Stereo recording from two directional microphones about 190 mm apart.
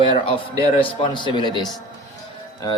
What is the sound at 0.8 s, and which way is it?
Speech, 25° left (ahead or behind).